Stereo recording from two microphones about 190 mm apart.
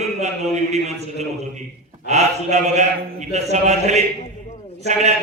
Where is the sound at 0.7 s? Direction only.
35° right (ahead or behind).